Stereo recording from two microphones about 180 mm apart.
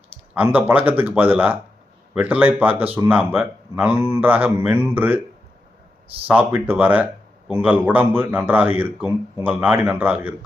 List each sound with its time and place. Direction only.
0.3 s speech: 10° right (ahead or behind)
6.2 s speech: 10° right (ahead or behind)